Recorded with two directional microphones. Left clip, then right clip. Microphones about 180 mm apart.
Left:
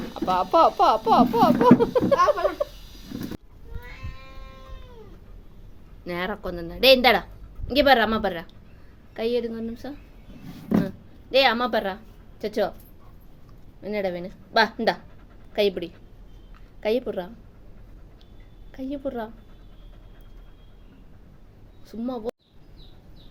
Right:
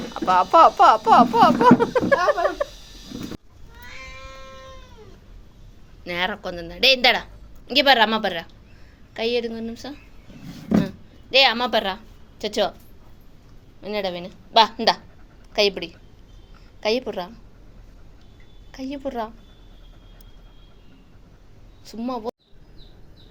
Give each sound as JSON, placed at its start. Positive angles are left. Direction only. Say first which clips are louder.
{"t": 0.1, "sound": "speech", "louder": "right 5 dB", "side_deg": 10}
{"t": 4.2, "sound": "sheep", "louder": "right 6 dB", "side_deg": -25}
{"t": 6.1, "sound": "a woman's voice", "louder": "right 4 dB", "side_deg": 20}
{"t": 13.8, "sound": "speech", "louder": "right 1 dB", "side_deg": 15}
{"t": 18.7, "sound": "speech", "louder": "right 1 dB", "side_deg": 15}
{"t": 21.8, "sound": "speech", "louder": "right 3 dB", "side_deg": 15}